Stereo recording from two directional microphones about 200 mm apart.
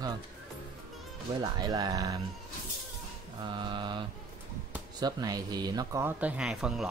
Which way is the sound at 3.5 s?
25° right (ahead or behind).